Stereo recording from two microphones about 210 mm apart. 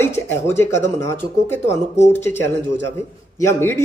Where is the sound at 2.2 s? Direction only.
10° left (ahead or behind).